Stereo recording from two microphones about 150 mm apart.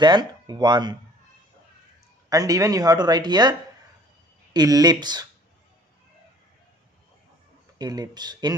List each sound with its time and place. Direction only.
0.0 s speech: 30° right (ahead or behind)
2.2 s speech: 25° right (ahead or behind)
4.6 s speech: 25° right (ahead or behind)
7.8 s speech: 25° right (ahead or behind)